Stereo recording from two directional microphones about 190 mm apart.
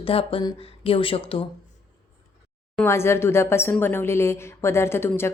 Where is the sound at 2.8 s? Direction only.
15° left (ahead or behind).